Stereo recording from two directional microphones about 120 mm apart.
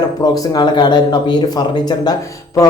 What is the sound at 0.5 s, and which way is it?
Speech, 35° left (ahead or behind).